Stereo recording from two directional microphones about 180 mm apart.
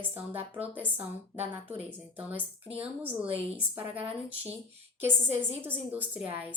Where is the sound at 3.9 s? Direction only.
30° right (ahead or behind).